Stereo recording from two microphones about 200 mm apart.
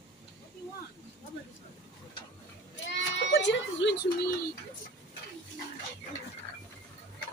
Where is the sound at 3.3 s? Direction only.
65° left (ahead or behind).